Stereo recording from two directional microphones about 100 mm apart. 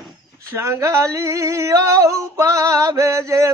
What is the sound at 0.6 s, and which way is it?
Female singing, 30° right (ahead or behind).